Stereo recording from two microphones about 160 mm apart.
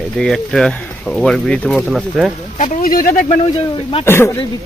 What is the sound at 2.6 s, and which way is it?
Speech, 55° left (ahead or behind).